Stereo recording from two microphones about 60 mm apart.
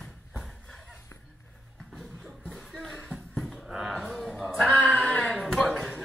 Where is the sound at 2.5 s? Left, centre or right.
Centre.